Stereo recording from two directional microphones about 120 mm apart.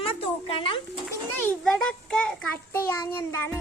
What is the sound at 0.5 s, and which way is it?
Speech, 50° left (ahead or behind).